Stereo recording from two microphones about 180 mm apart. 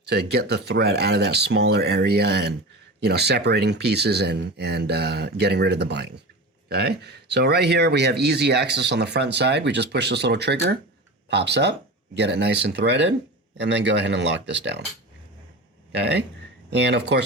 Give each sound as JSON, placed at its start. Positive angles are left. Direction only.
{"t": 0.1, "sound": "speech", "side_deg": -65}
{"t": 15.9, "sound": "speech", "side_deg": -70}